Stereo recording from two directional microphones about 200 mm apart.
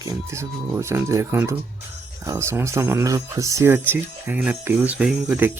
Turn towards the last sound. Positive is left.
turn(degrees=-5)  # may be behind; listen again after turning